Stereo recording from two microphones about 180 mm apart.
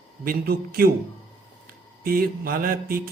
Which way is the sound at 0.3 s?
55° right (ahead or behind).